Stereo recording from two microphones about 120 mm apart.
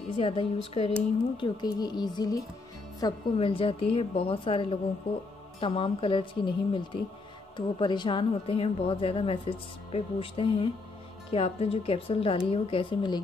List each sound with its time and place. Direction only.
0.2 s speech: 55° left (ahead or behind)
1.3 s a woman's voice: 40° left (ahead or behind)
3.3 s a woman's voice: 50° left (ahead or behind)